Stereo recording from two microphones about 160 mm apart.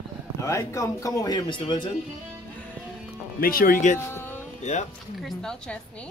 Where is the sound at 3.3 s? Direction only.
65° left (ahead or behind).